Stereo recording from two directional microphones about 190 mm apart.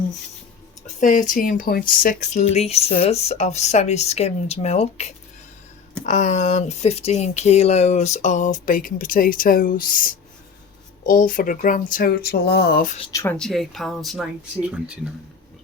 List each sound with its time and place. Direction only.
0.9 s speech: 40° left (ahead or behind)
13.1 s speech: 10° left (ahead or behind)